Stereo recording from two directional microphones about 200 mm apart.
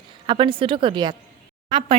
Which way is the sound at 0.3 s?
25° right (ahead or behind).